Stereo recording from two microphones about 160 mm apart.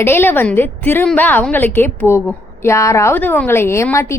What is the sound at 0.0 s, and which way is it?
A woman's voice, 15° left (ahead or behind).